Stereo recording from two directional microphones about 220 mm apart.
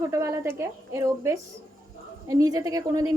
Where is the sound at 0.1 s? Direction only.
15° right (ahead or behind).